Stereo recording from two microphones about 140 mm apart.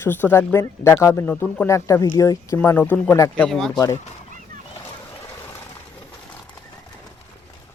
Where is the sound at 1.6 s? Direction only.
20° left (ahead or behind); by 3.8 s 5° left (ahead or behind).